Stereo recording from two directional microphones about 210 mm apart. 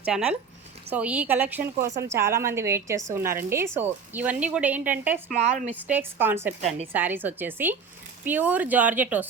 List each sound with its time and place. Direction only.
0.0 s a woman's voice: 5° right (ahead or behind)
5.4 s a woman's voice: 35° right (ahead or behind)
5.9 s a woman's voice: 10° right (ahead or behind)
6.6 s a woman's voice: 30° right (ahead or behind)
6.9 s a woman's voice: 10° right (ahead or behind)